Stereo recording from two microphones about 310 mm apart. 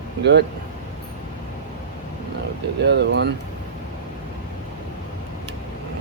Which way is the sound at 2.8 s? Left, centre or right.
Right.